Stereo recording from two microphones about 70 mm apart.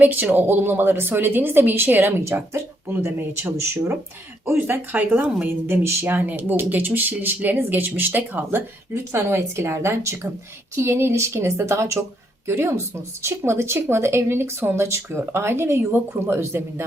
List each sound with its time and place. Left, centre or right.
0.0 s speech: right
5.6 s speech: right